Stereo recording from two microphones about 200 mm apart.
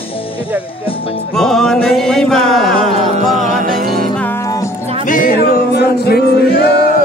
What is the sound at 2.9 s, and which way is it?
Music, 35° right (ahead or behind).